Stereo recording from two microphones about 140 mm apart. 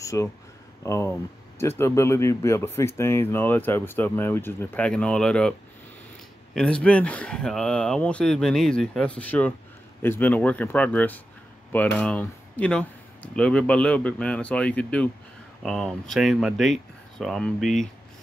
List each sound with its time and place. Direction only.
0.0 s speech: 20° left (ahead or behind); by 5.5 s 5° left (ahead or behind)
6.5 s speech: 5° left (ahead or behind)